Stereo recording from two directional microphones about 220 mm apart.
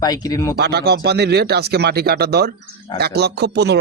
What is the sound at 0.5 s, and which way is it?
Speech, 45° right (ahead or behind).